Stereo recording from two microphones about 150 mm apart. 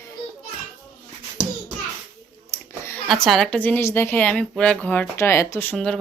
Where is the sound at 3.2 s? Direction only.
5° left (ahead or behind).